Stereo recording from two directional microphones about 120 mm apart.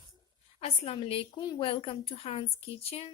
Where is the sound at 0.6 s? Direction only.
55° left (ahead or behind).